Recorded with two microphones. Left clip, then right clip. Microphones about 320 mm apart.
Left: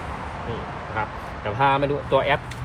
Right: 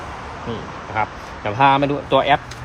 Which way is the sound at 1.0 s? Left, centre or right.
Right.